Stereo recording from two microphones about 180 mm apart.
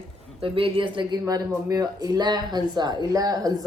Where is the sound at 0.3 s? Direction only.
30° right (ahead or behind).